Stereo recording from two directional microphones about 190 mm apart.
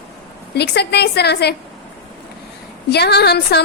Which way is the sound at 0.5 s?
60° left (ahead or behind).